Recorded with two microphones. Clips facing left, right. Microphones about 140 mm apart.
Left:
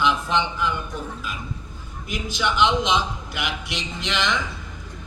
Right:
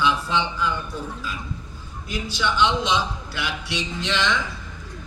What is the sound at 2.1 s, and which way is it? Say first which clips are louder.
A man's voice: even; 20° left (ahead or behind).